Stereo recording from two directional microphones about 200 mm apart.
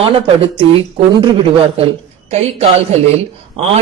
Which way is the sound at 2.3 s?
30° right (ahead or behind).